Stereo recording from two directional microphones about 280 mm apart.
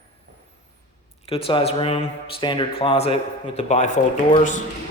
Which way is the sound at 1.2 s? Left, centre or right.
Centre.